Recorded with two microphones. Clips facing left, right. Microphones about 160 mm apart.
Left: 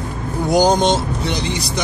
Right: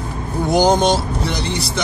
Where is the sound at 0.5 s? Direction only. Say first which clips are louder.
Even; 15° left (ahead or behind).